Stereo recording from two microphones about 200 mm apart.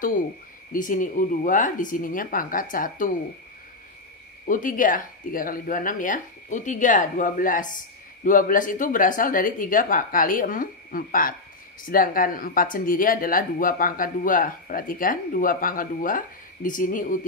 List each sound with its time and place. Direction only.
0.7 s speech: 40° left (ahead or behind)
4.5 s speech: 40° left (ahead or behind)